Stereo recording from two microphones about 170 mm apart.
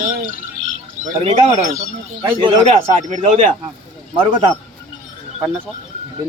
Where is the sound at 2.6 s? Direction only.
45° right (ahead or behind).